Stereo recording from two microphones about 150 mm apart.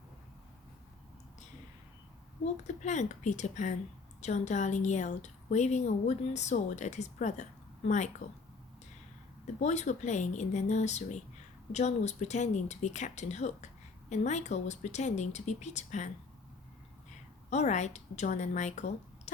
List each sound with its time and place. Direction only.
2.6 s a woman's voice: 50° left (ahead or behind)
9.6 s a woman's voice: 50° left (ahead or behind)
17.5 s a woman's voice: 50° left (ahead or behind)